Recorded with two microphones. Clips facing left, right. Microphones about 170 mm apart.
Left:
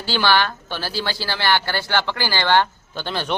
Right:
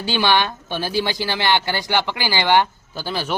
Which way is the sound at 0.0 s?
15° right (ahead or behind).